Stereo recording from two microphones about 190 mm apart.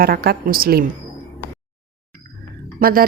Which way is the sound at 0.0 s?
50° right (ahead or behind).